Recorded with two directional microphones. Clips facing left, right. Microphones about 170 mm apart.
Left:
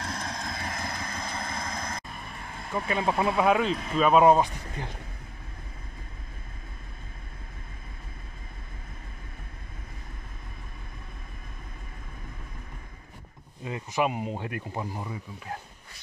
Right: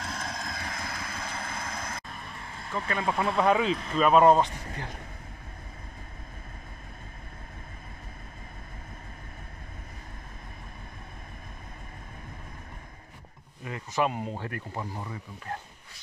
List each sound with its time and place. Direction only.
0.0 s vehicle: centre (ahead or behind)
2.7 s speech: 15° left (ahead or behind)
13.7 s speech: 15° left (ahead or behind)